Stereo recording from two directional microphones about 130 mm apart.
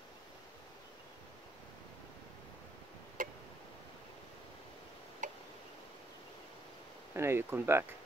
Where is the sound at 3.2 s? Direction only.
90° right.